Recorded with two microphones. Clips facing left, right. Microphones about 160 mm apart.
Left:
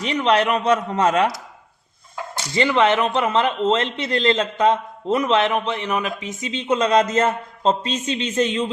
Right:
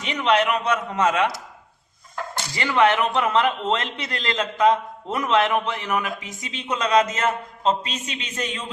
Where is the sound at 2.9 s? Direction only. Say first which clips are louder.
Left 2 dB; centre (ahead or behind).